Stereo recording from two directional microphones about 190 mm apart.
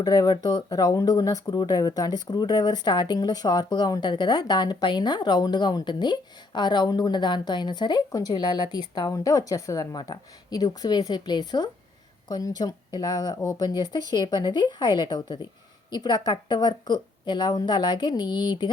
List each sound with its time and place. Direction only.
0.0 s speech: 20° left (ahead or behind)